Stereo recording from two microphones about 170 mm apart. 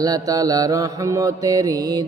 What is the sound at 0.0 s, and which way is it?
Mantra, 20° right (ahead or behind).